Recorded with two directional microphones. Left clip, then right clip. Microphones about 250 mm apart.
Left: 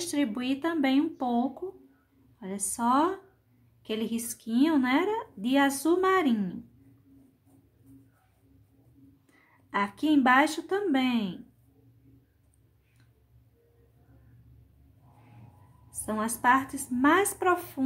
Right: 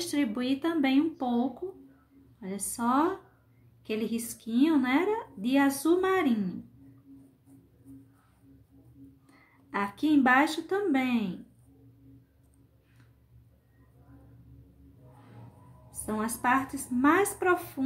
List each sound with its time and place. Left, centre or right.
0.0 s a woman's voice: centre
2.4 s a woman's voice: centre
9.7 s a woman's voice: centre
16.1 s a woman's voice: centre